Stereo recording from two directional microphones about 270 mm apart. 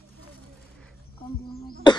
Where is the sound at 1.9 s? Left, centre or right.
Centre.